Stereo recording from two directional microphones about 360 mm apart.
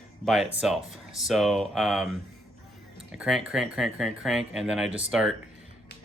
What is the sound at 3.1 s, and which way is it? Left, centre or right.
Speech, centre.